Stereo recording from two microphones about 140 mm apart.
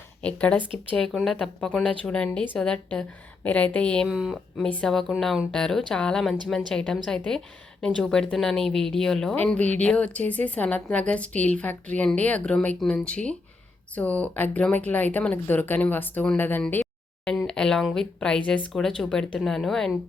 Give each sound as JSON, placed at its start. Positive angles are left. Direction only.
{"t": 0.2, "sound": "a woman's voice", "side_deg": 10}